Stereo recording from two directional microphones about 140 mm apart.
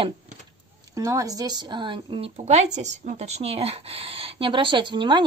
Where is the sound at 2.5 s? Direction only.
55° right (ahead or behind).